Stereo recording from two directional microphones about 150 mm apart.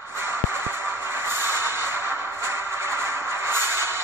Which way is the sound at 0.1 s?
15° right (ahead or behind).